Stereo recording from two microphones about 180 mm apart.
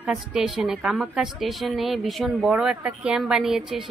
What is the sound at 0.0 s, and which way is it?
A woman's voice, 5° right (ahead or behind).